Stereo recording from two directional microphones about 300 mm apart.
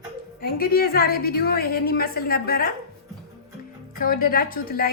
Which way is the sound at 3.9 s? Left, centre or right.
Left.